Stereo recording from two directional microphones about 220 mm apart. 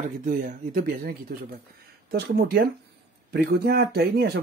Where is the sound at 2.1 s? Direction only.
45° right (ahead or behind).